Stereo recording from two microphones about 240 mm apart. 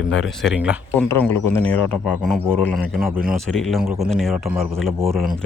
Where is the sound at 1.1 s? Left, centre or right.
Centre.